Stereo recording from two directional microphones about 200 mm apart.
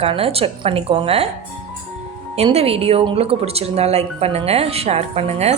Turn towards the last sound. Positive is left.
turn(degrees=-30)  # may be behind; listen again after turning